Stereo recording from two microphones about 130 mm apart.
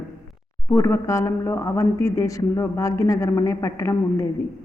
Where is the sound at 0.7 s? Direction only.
20° left (ahead or behind).